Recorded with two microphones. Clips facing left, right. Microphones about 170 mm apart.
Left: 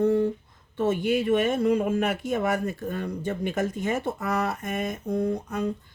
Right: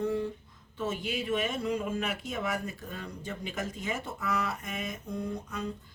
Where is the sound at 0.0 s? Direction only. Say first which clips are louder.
Left 9 dB; 50° left (ahead or behind).